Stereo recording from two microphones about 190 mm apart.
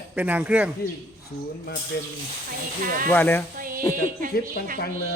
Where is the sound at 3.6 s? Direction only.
50° right (ahead or behind).